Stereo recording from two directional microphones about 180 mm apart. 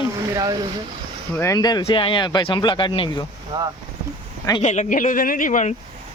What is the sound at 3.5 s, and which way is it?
Speech, 25° right (ahead or behind).